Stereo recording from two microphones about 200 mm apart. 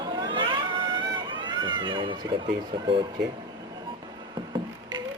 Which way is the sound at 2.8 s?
25° right (ahead or behind).